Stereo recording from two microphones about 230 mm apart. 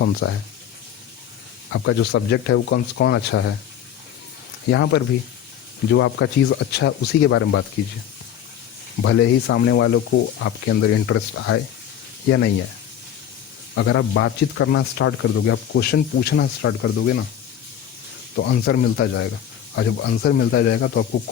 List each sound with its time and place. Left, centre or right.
0.0 s speech: left
1.7 s speech: left
4.7 s speech: left
9.0 s speech: left
13.7 s speech: left
18.3 s speech: left